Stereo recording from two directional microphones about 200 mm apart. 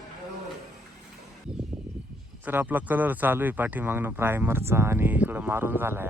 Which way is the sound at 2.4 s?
10° right (ahead or behind).